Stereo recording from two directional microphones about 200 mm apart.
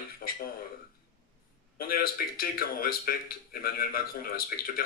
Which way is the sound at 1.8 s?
45° left (ahead or behind).